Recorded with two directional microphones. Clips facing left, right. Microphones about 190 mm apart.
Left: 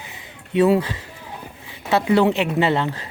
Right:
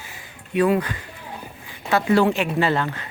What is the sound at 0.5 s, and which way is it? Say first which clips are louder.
Speech: left 3 dB; 25° left (ahead or behind).